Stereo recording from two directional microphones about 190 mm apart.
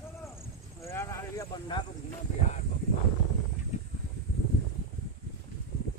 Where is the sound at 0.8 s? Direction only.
15° left (ahead or behind).